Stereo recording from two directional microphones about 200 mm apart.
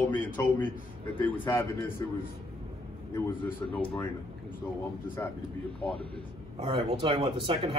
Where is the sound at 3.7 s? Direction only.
10° left (ahead or behind).